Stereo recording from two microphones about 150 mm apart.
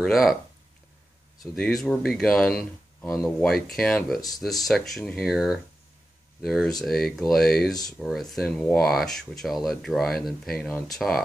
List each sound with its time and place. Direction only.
0.0 s speech: centre (ahead or behind)
1.4 s speech: centre (ahead or behind)